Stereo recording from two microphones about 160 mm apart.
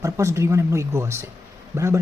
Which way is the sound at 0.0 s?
20° right (ahead or behind).